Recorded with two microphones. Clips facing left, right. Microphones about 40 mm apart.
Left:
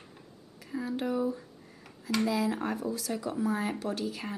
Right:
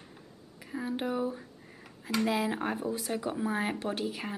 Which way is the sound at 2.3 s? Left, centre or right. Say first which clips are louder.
Right 1 dB; right.